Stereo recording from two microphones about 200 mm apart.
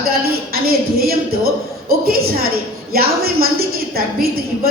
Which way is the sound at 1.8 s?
50° right (ahead or behind).